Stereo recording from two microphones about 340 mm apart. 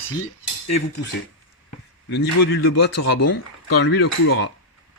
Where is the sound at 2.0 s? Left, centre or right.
Left.